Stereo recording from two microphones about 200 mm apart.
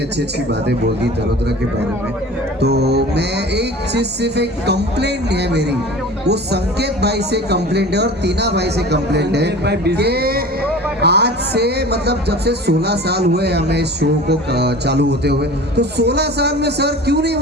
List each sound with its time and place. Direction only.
2.6 s speech: 55° right (ahead or behind)